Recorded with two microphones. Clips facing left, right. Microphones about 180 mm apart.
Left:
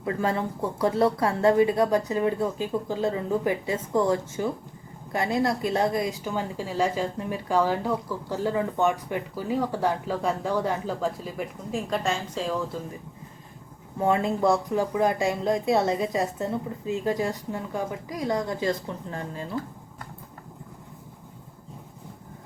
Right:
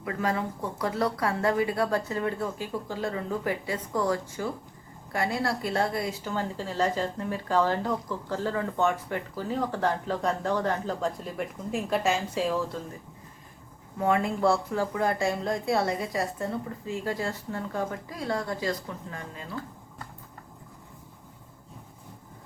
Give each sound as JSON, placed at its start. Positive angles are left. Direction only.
{"t": 0.0, "sound": "a woman's voice", "side_deg": 30}
{"t": 14.0, "sound": "speech", "side_deg": 25}